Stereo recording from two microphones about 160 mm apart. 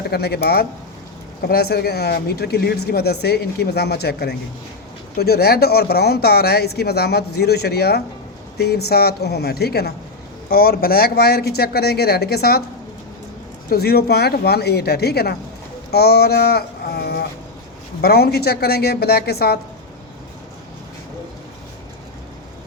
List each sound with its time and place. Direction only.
0.1 s speech: 85° left
5.1 s speech: 80° left
13.7 s speech: 80° left